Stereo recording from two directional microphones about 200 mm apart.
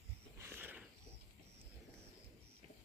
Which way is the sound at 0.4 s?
10° right (ahead or behind).